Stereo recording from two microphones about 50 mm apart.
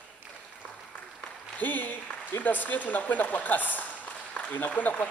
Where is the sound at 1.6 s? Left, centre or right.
Left.